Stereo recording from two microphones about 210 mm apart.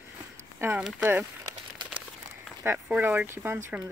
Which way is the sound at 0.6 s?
5° right (ahead or behind).